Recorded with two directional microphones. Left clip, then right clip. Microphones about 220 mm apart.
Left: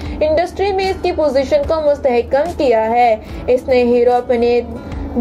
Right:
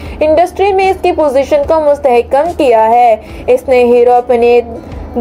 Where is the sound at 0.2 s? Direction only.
15° right (ahead or behind).